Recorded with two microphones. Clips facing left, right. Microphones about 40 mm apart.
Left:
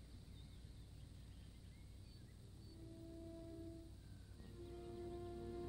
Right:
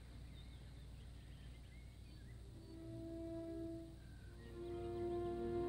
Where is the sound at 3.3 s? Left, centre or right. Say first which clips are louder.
Right 8 dB; right.